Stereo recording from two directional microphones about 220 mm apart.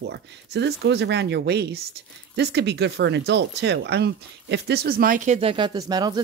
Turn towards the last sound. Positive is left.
turn(degrees=-20)  # may be behind; listen again after turning